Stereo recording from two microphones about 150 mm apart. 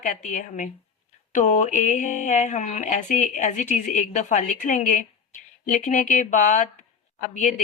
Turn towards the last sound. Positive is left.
turn(degrees=55)  # may be behind; listen again after turning